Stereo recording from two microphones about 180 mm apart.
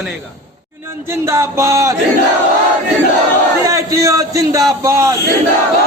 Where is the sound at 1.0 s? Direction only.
15° right (ahead or behind).